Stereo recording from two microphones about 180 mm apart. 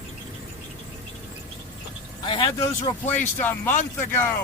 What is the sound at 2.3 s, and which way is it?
Speech, 30° left (ahead or behind).